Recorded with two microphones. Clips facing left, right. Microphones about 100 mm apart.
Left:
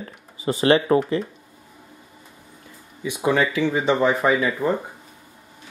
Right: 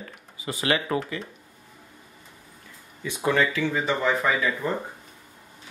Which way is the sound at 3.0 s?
15° left (ahead or behind).